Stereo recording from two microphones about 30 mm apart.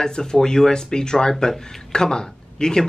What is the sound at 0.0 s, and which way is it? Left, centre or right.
Speech, left.